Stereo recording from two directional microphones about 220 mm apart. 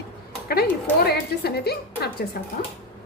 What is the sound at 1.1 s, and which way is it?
A woman's voice, 45° left (ahead or behind).